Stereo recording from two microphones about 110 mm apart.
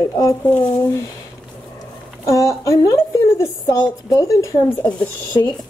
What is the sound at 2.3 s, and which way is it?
A woman's voice, 30° left (ahead or behind).